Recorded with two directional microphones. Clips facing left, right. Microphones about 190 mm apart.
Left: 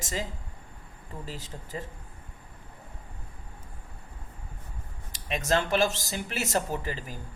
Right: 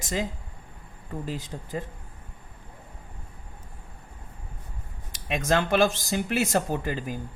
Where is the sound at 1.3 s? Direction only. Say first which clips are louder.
Right 7 dB; 55° right (ahead or behind).